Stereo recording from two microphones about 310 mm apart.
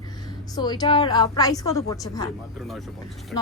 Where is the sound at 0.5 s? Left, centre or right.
Centre.